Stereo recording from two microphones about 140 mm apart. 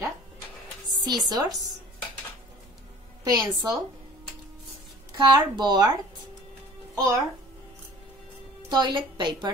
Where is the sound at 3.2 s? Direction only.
25° right (ahead or behind).